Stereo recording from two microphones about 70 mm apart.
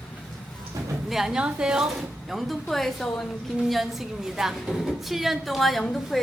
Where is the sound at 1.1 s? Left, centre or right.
Centre.